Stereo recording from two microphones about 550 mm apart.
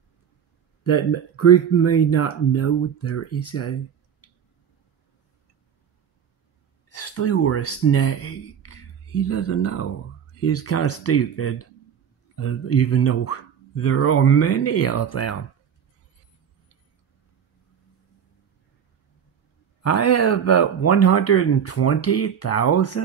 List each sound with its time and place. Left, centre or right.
0.8 s speech: left
6.9 s speech: left
19.8 s speech: left